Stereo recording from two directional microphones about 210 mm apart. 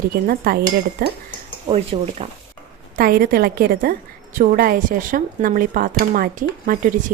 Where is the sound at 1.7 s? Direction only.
30° right (ahead or behind).